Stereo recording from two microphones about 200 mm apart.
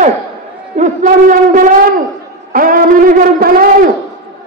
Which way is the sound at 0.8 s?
40° right (ahead or behind).